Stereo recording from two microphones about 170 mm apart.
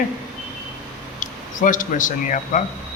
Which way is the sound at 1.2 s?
50° left (ahead or behind).